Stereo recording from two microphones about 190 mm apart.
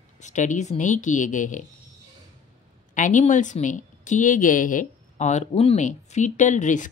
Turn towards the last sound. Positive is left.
turn(degrees=40)  # may be behind; listen again after turning